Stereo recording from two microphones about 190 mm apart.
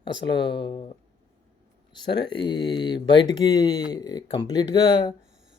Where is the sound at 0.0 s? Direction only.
25° left (ahead or behind).